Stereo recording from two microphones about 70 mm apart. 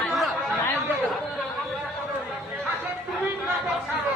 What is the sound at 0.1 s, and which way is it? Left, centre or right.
Chatter, centre.